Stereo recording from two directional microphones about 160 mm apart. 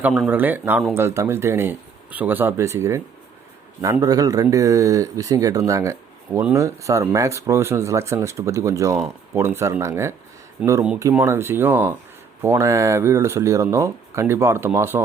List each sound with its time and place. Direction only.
0.0 s speech: centre (ahead or behind)
0.3 s speech: 10° right (ahead or behind)